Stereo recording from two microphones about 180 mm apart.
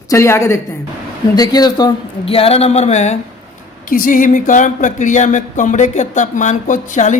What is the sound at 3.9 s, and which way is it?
Speech, 50° left (ahead or behind).